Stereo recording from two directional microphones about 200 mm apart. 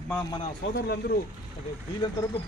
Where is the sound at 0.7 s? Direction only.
50° left (ahead or behind).